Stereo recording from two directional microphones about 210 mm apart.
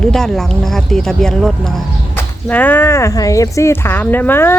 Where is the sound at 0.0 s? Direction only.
Centre (ahead or behind).